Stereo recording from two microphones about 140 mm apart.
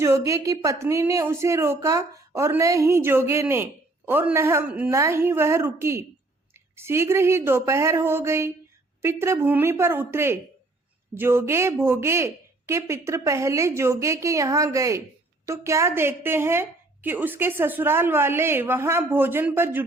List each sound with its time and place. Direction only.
0.0 s a woman's voice: 20° right (ahead or behind)